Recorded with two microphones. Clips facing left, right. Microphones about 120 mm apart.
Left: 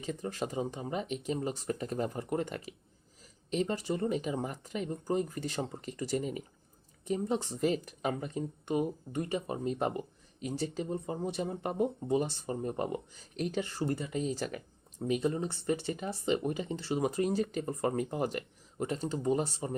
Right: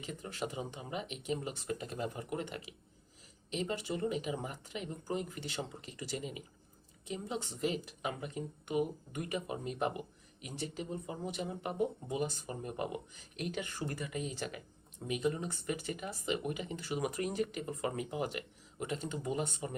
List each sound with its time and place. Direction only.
0.0 s speech: 40° left (ahead or behind)